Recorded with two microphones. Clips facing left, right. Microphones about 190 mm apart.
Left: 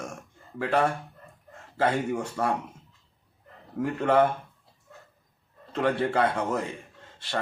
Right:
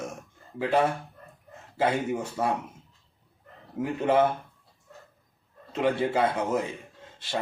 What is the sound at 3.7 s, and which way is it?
Speech, 15° right (ahead or behind).